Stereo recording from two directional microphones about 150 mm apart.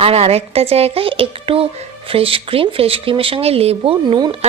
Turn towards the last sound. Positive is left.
turn(degrees=-40)  # may be behind; listen again after turning